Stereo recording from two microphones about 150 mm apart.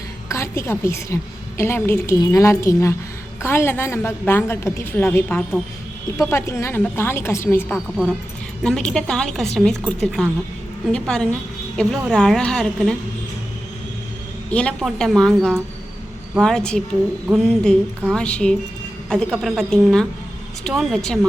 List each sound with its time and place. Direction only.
0.3 s a woman's voice: 20° left (ahead or behind)
8.6 s a woman's voice: 5° left (ahead or behind)
14.5 s a woman's voice: 10° left (ahead or behind)